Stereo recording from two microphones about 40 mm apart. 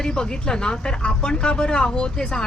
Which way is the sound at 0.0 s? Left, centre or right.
Centre.